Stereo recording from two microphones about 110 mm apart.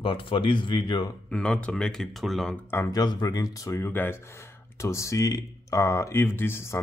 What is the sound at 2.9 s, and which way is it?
Speech, 35° left (ahead or behind).